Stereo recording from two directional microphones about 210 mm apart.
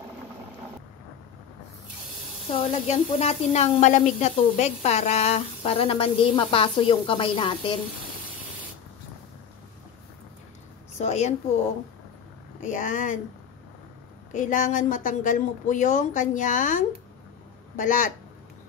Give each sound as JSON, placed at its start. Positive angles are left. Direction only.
{"t": 2.6, "sound": "speech", "side_deg": 30}
{"t": 11.0, "sound": "a woman's voice", "side_deg": 35}
{"t": 12.6, "sound": "a woman's voice", "side_deg": 35}
{"t": 14.3, "sound": "a woman's voice", "side_deg": 35}